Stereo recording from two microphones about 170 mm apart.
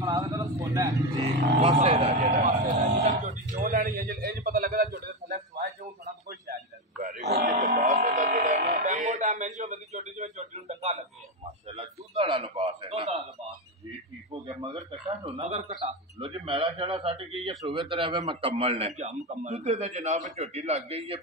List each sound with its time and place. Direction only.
0.0 s speech: 20° right (ahead or behind)
1.2 s a man's voice: 35° right (ahead or behind)
2.4 s a man's voice: 50° right (ahead or behind)
7.0 s a sound: 50° right (ahead or behind)
14.9 s a sound: 40° right (ahead or behind)
15.7 s a man's voice: 30° right (ahead or behind)